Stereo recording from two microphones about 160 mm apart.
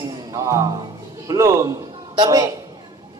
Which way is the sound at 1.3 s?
20° right (ahead or behind).